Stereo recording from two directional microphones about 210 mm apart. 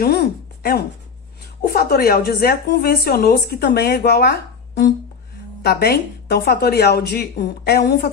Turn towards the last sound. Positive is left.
turn(degrees=50)  # may be behind; listen again after turning